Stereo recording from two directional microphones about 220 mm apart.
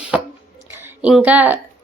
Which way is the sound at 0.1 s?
5° right (ahead or behind).